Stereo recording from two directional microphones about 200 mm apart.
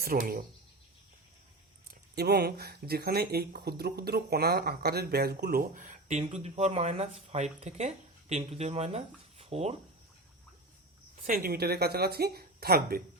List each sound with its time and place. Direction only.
0.0 s speech: 45° right (ahead or behind)
2.1 s speech: 55° right (ahead or behind); by 9.7 s 30° right (ahead or behind)
11.3 s speech: 50° right (ahead or behind)